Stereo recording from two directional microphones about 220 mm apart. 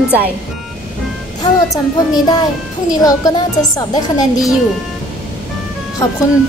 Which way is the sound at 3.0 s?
15° left (ahead or behind).